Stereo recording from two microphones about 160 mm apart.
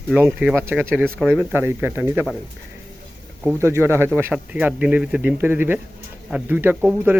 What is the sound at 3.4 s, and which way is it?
Speech, 15° right (ahead or behind).